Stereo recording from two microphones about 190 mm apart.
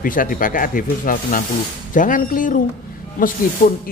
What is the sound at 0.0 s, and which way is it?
Speech, 45° left (ahead or behind).